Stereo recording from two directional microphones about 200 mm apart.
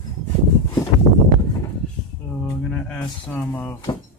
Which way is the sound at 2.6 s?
5° left (ahead or behind).